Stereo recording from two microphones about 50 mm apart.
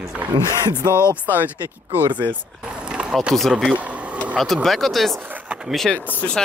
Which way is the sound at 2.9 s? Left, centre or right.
Centre.